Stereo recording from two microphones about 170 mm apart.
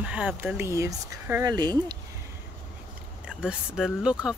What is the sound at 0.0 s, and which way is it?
Speech, 10° right (ahead or behind).